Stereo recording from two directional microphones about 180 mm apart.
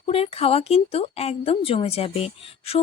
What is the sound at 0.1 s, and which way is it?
A woman's voice, 35° left (ahead or behind).